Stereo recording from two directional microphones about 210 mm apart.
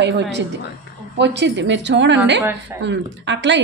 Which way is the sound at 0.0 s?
55° right (ahead or behind).